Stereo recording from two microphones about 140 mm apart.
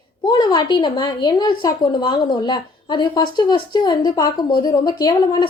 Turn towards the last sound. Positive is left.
turn(degrees=30)  # may be behind; listen again after turning